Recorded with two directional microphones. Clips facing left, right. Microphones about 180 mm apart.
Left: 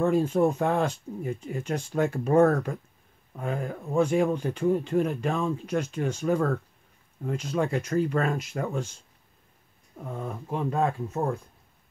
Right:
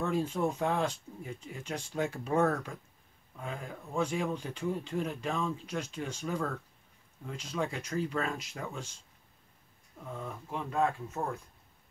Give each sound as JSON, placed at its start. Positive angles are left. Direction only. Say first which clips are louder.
{"t": 0.0, "sound": "speech", "louder": "left 8 dB", "side_deg": 50}
{"t": 10.1, "sound": "speech", "louder": "left 7 dB", "side_deg": 45}